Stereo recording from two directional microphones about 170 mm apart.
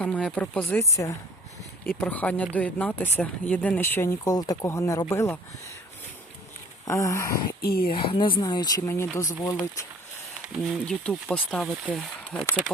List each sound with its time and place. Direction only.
0.0 s speech: 5° left (ahead or behind)
6.8 s speech: 15° left (ahead or behind)
7.6 s speech: 65° left (ahead or behind)
7.9 s speech: 30° left (ahead or behind)
10.4 s speech: centre (ahead or behind)